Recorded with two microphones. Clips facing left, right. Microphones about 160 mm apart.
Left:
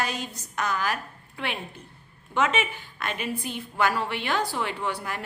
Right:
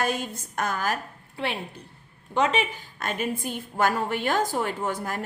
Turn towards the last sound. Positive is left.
turn(degrees=-45)  # may be behind; listen again after turning